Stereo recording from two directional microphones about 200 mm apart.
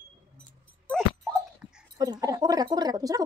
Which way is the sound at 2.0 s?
20° right (ahead or behind).